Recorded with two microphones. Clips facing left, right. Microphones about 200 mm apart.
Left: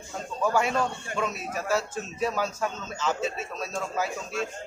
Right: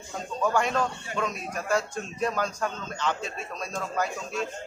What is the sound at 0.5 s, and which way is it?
A man's voice, 5° left (ahead or behind).